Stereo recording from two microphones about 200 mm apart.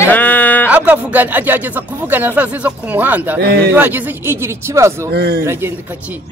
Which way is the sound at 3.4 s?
55° right (ahead or behind).